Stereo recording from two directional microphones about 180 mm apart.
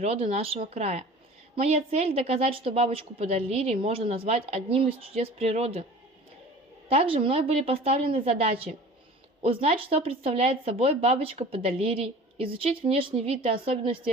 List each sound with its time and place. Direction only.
0.0 s speech: 35° right (ahead or behind)
6.8 s a woman's voice: 30° right (ahead or behind)